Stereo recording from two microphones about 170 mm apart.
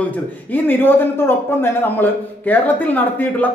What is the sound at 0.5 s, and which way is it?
A man's voice, 10° left (ahead or behind).